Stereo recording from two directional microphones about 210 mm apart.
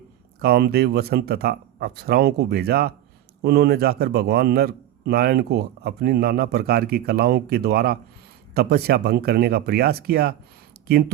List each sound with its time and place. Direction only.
0.3 s a man's voice: 50° right (ahead or behind)